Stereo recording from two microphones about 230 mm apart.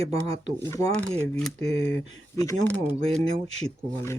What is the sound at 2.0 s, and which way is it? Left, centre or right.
Speech, centre.